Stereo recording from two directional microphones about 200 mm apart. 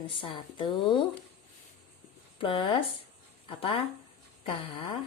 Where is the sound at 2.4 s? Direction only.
25° left (ahead or behind).